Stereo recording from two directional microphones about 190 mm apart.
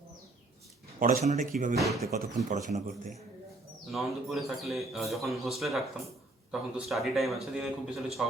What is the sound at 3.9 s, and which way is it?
A man's voice, centre (ahead or behind).